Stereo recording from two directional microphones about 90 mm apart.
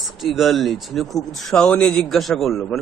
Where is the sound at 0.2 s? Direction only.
Centre (ahead or behind).